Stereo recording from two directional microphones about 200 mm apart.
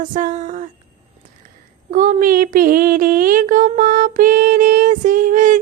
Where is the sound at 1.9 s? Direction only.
40° right (ahead or behind).